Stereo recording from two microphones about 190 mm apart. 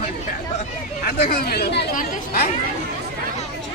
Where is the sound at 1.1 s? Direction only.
55° left (ahead or behind).